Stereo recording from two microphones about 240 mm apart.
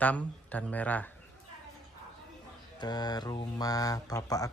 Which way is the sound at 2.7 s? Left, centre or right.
Centre.